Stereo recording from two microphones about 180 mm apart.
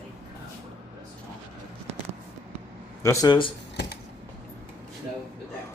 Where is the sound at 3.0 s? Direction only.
20° left (ahead or behind).